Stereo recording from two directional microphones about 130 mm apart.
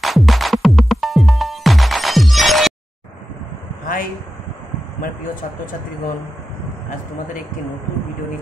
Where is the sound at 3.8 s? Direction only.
90° left.